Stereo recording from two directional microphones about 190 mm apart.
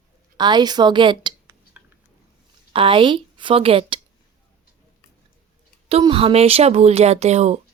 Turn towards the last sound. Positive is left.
turn(degrees=-35)  # may be behind; listen again after turning